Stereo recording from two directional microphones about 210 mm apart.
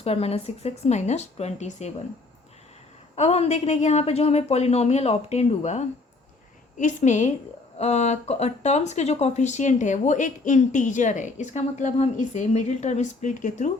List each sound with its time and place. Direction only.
0.0 s speech: 30° left (ahead or behind)
3.2 s speech: 30° left (ahead or behind)